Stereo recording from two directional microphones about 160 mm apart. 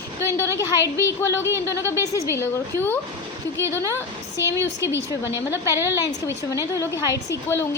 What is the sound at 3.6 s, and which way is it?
Speech, 20° right (ahead or behind).